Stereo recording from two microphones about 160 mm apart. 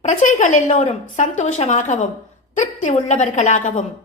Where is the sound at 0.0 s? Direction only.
50° left (ahead or behind).